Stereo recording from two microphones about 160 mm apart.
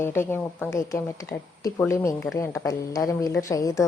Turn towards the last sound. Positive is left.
turn(degrees=20)  # may be behind; listen again after turning